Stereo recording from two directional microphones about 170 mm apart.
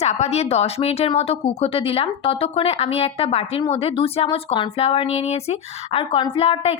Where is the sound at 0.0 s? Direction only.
40° left (ahead or behind).